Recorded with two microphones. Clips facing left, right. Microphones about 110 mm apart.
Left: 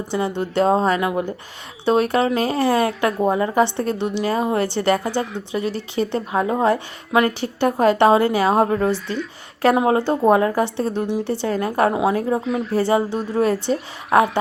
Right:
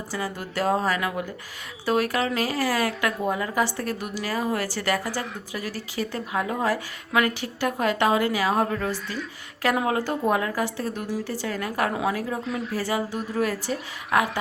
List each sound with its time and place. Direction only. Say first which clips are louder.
0.1 s a woman's voice: left 9 dB; 25° left (ahead or behind)
8.9 s speech: left 7 dB; centre (ahead or behind)
9.6 s a woman's voice: left 7 dB; 30° left (ahead or behind)